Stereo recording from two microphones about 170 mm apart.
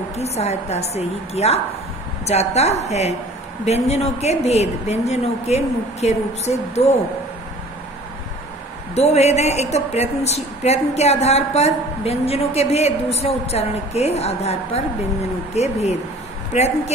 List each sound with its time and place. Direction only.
0.1 s speech: 40° left (ahead or behind)
8.9 s speech: 40° left (ahead or behind)